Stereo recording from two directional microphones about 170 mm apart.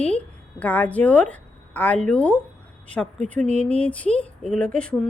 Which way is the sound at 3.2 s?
45° right (ahead or behind).